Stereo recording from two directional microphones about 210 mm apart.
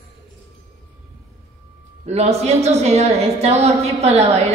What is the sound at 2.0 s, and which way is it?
A woman's voice, 30° right (ahead or behind).